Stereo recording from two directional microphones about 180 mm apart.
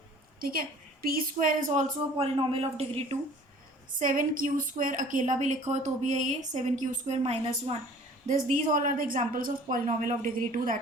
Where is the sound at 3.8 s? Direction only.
50° right (ahead or behind).